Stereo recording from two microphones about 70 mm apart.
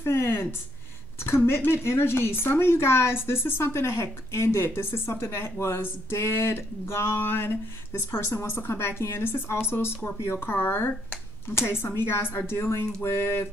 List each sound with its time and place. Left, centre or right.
0.0 s speech: left
11.4 s speech: left